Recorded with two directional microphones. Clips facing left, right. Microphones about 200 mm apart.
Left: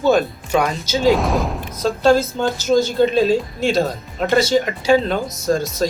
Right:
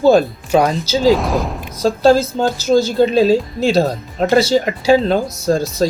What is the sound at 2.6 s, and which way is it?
Speech, 35° right (ahead or behind).